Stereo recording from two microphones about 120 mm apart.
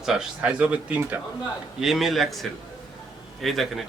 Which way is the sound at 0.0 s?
5° right (ahead or behind).